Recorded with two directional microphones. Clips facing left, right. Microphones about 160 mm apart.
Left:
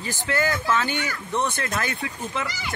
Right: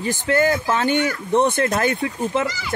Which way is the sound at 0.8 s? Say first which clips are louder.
Right 8 dB; 55° right (ahead or behind).